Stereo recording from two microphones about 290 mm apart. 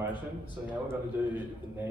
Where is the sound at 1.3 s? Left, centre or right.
Centre.